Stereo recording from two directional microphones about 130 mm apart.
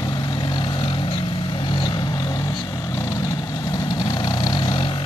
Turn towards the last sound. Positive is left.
turn(degrees=40)  # may be behind; listen again after turning